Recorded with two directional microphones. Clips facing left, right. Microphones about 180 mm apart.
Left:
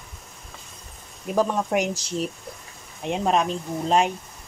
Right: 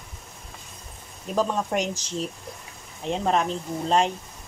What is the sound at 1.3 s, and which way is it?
Speech, 10° left (ahead or behind).